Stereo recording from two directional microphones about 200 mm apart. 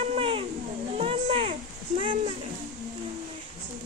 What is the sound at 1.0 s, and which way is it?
Children playing, 30° right (ahead or behind).